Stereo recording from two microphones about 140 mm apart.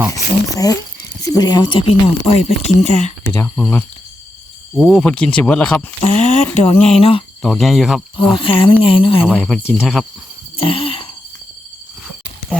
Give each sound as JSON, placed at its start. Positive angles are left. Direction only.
{"t": 0.5, "sound": "speech", "side_deg": 25}
{"t": 3.3, "sound": "speech", "side_deg": 10}
{"t": 6.0, "sound": "speech", "side_deg": 55}
{"t": 7.4, "sound": "speech", "side_deg": 0}
{"t": 8.1, "sound": "speech", "side_deg": 40}
{"t": 9.3, "sound": "speech", "side_deg": 0}
{"t": 10.6, "sound": "a sound", "side_deg": 40}